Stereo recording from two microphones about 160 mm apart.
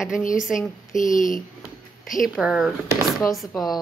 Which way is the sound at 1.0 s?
55° left (ahead or behind).